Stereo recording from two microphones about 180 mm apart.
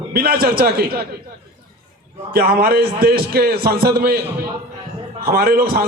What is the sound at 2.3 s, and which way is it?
A man's voice, 60° right (ahead or behind).